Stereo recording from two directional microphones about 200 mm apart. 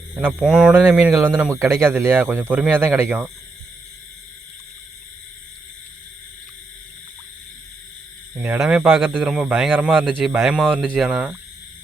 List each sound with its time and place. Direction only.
0.2 s speech: 5° right (ahead or behind)
8.4 s speech: 5° right (ahead or behind)